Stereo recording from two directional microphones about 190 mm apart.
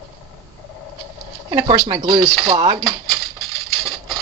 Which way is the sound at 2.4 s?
35° right (ahead or behind).